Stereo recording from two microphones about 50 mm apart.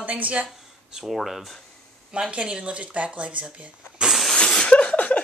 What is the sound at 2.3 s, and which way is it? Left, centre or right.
Speech, right.